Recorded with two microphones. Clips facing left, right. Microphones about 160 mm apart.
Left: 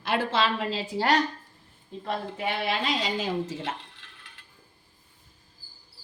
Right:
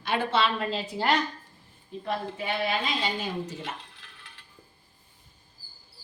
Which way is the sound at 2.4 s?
85° left.